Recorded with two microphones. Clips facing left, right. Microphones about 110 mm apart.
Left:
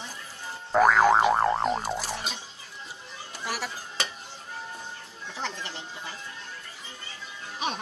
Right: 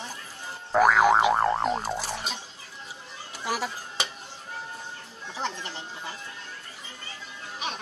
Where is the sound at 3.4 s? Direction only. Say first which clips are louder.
Right 4 dB; 20° right (ahead or behind).